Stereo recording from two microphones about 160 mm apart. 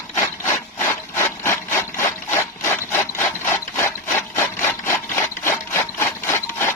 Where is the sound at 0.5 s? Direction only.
15° left (ahead or behind).